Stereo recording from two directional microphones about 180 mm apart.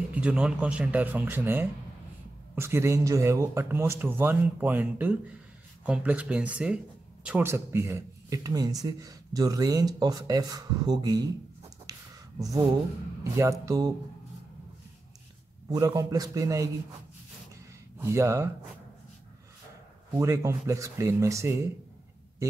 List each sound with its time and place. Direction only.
0.1 s speech: 5° right (ahead or behind); by 11.2 s 20° right (ahead or behind)
11.8 s a sound: 20° right (ahead or behind)
13.4 s speech: 15° right (ahead or behind)
15.7 s speech: 20° right (ahead or behind)
17.9 s speech: 15° right (ahead or behind)
20.2 s speech: 15° right (ahead or behind)